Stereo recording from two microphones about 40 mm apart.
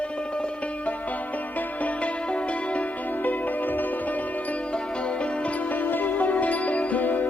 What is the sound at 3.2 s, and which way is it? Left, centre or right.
Music, left.